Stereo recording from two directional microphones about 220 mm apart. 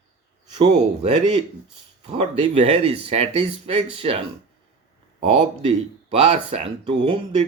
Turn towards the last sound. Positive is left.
turn(degrees=-25)  # may be behind; listen again after turning